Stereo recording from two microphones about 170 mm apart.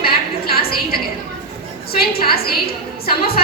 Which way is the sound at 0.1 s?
65° left (ahead or behind).